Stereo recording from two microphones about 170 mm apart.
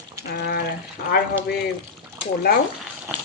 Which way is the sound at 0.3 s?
70° left (ahead or behind).